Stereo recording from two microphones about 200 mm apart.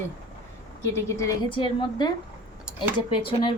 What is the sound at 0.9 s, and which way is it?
Speech, 20° left (ahead or behind).